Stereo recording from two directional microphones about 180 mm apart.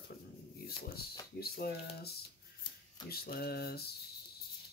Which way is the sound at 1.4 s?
60° left (ahead or behind).